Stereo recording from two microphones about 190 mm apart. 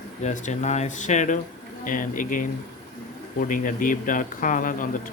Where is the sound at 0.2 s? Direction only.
40° left (ahead or behind).